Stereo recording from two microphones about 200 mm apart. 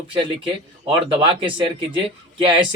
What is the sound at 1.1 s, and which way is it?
Speech, 25° right (ahead or behind).